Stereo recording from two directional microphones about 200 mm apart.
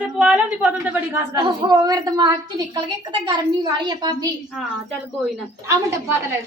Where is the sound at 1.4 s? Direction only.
20° right (ahead or behind).